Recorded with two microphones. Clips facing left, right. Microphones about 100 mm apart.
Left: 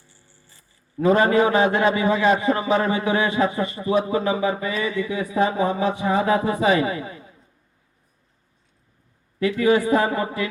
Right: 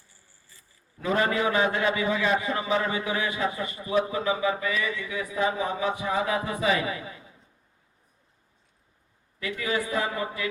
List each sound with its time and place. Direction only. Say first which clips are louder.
0.1 s a sound: left 4 dB; 30° left (ahead or behind)
1.0 s a man's voice: left 8 dB; 40° left (ahead or behind)
3.2 s speech: left 7 dB; 40° left (ahead or behind)
9.7 s speech: left 8 dB; 40° left (ahead or behind)